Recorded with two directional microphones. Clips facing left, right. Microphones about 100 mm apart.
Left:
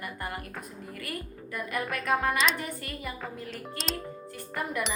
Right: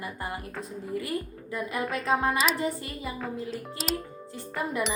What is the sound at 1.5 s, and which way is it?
A woman's voice, 20° right (ahead or behind).